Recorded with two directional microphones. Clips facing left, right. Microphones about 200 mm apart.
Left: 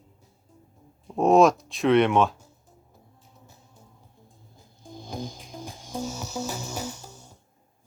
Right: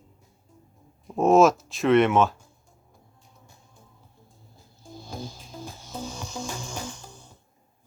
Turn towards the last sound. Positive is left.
turn(degrees=10)  # may be behind; listen again after turning